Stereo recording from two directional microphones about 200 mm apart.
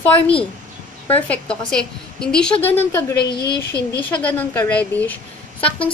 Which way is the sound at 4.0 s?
10° left (ahead or behind).